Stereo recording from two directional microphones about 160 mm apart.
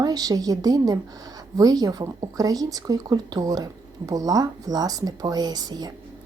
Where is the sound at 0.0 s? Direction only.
25° right (ahead or behind).